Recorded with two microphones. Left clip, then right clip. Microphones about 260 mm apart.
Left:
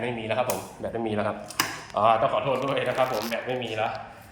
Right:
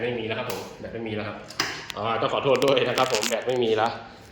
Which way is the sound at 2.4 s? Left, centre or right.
Centre.